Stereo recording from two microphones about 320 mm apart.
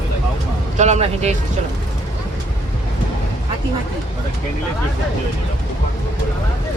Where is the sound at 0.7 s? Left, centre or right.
Right.